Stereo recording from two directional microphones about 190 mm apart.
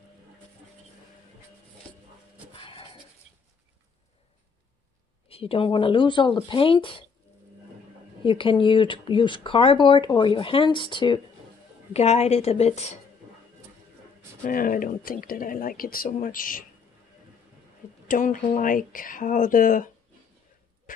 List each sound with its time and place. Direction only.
2.5 s a sound: 25° left (ahead or behind)
5.3 s speech: 30° left (ahead or behind)
8.2 s speech: 25° left (ahead or behind)
11.9 s a woman's voice: 35° left (ahead or behind)
14.4 s speech: 45° left (ahead or behind)
18.0 s speech: 45° left (ahead or behind)